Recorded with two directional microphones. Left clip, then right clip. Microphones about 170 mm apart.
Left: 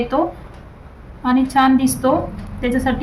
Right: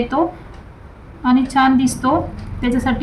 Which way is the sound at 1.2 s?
20° left (ahead or behind).